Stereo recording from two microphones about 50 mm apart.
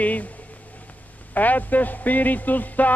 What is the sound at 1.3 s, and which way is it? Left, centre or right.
Speech, left.